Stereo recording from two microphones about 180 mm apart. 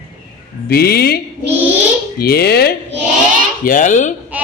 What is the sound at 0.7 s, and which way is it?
A man's voice, 60° left (ahead or behind).